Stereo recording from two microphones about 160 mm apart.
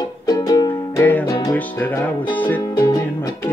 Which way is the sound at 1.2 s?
25° left (ahead or behind).